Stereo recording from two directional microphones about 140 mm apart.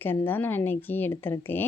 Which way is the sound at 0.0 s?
15° left (ahead or behind).